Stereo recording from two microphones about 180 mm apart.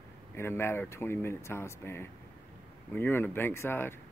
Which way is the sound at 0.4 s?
15° left (ahead or behind).